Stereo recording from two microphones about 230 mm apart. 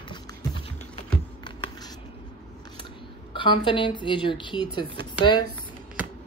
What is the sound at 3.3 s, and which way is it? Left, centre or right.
Speech, left.